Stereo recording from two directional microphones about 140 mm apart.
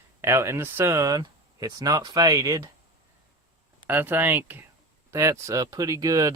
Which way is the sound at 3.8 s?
15° right (ahead or behind).